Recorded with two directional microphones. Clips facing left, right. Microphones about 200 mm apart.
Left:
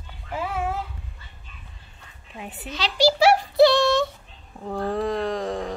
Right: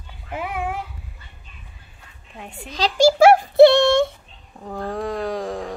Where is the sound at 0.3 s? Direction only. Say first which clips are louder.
Even; 15° right (ahead or behind).